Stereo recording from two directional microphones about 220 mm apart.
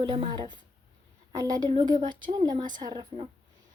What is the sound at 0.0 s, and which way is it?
A woman's voice, 20° right (ahead or behind).